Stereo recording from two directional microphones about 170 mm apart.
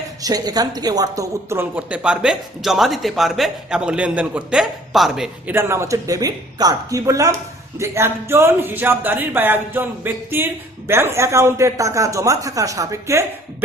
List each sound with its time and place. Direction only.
0.2 s speech: 20° right (ahead or behind); by 5.5 s 5° right (ahead or behind)
5.5 s speech: 15° right (ahead or behind)